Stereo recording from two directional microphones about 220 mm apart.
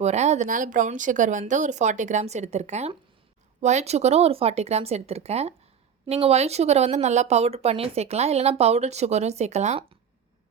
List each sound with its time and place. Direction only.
0.0 s a woman's voice: 30° right (ahead or behind)